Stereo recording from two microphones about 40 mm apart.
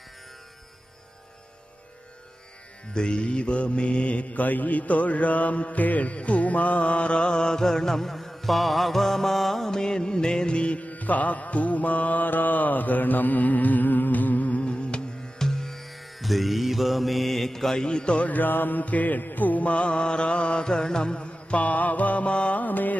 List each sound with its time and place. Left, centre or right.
2.9 s mantra: left
14.6 s music: left
15.4 s music: centre
17.8 s speech: left
18.2 s mantra: left